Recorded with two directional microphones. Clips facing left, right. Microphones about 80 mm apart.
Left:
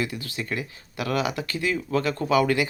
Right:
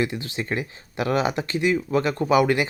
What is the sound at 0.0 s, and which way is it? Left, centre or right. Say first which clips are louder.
Speech: right 4 dB; right.